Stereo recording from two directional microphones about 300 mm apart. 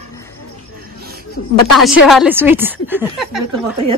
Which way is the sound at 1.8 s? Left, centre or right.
Centre.